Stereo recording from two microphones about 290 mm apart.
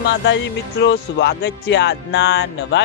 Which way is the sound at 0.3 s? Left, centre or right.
Left.